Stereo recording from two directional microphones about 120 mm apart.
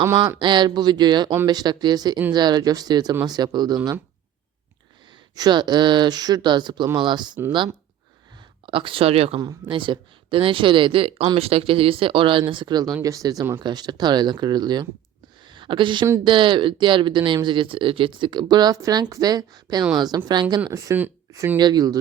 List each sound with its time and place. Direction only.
0.3 s speech: 40° right (ahead or behind)
5.3 s speech: 35° right (ahead or behind)
8.6 s speech: 45° right (ahead or behind)
9.4 s speech: 40° right (ahead or behind)
15.4 s a sound: 40° right (ahead or behind)
16.2 s speech: 45° right (ahead or behind); by 21.6 s 20° right (ahead or behind)
21.6 s speech: 35° right (ahead or behind)